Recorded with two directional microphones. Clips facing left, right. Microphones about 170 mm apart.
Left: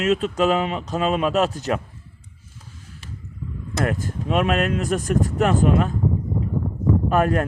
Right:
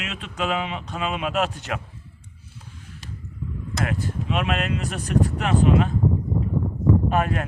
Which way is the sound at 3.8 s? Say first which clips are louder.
Left 3 dB; 45° left (ahead or behind).